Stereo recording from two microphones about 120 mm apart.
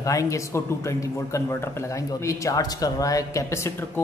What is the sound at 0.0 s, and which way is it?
Speech, 25° left (ahead or behind).